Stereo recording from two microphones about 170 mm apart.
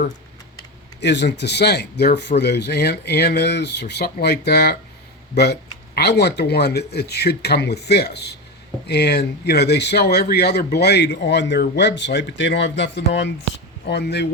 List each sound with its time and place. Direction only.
1.0 s a man's voice: 90° left
13.8 s speech: 75° left (ahead or behind)